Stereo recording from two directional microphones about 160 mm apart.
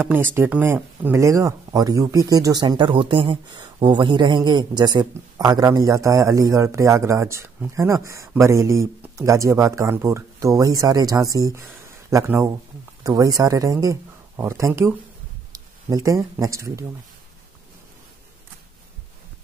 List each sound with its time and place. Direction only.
0.0 s speech: 10° right (ahead or behind)